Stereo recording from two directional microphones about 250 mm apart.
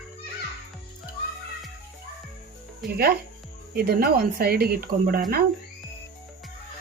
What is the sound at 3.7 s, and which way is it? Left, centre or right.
A woman's voice, right.